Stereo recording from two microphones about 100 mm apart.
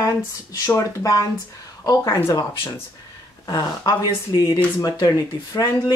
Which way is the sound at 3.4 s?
40° left (ahead or behind).